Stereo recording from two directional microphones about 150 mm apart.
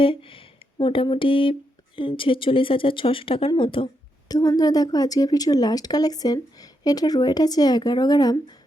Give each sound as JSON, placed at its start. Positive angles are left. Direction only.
{"t": 0.0, "sound": "a woman's voice", "side_deg": 35}